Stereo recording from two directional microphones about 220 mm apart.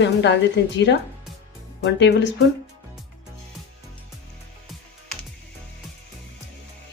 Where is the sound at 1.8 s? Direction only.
50° left (ahead or behind).